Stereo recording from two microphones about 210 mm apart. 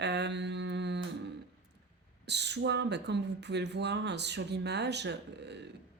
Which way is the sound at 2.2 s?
55° right (ahead or behind).